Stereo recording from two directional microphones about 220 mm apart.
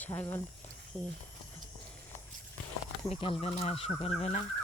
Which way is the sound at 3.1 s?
25° left (ahead or behind).